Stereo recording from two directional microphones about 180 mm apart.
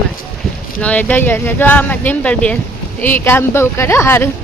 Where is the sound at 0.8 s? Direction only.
10° left (ahead or behind).